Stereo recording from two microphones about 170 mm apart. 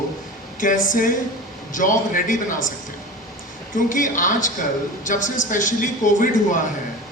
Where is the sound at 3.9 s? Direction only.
50° left (ahead or behind).